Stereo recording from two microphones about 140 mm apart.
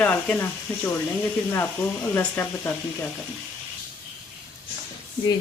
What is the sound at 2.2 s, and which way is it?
Speech, 15° left (ahead or behind).